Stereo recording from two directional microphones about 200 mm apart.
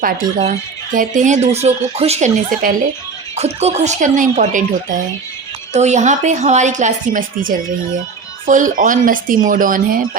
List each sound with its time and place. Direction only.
0.0 s speech: 45° right (ahead or behind)